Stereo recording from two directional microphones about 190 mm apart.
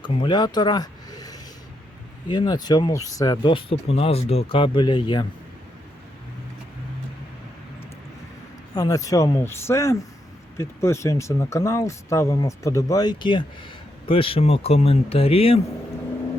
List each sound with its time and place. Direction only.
0.0 s speech: 25° left (ahead or behind)
8.7 s speech: 20° left (ahead or behind)